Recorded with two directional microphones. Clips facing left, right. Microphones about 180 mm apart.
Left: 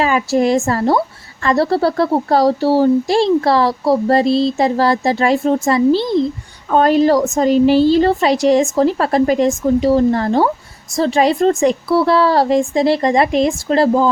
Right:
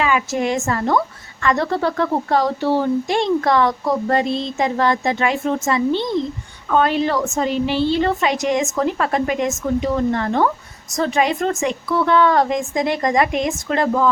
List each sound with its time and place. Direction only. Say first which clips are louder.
0.0 s a woman's voice: left 5 dB; 35° left (ahead or behind)